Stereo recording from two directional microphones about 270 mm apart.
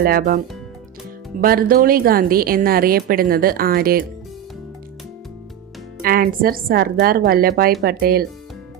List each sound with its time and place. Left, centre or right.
0.0 s a woman's voice: right
6.0 s a woman's voice: right